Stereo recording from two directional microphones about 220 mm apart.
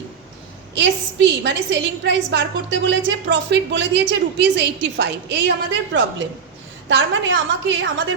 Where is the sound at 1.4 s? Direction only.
55° right (ahead or behind).